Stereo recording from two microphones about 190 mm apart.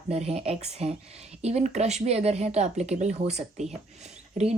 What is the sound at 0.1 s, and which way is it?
Speech, 35° right (ahead or behind).